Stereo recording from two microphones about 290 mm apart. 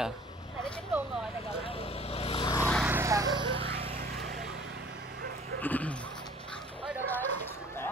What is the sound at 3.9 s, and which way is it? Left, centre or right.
Vehicle, right.